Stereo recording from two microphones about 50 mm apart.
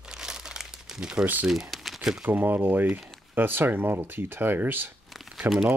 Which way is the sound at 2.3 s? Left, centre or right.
Right.